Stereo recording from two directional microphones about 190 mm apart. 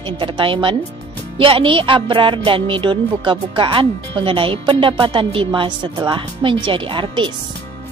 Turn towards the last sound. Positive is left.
turn(degrees=-25)  # may be behind; listen again after turning